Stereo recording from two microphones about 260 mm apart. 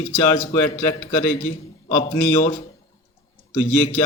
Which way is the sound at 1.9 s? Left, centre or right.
Left.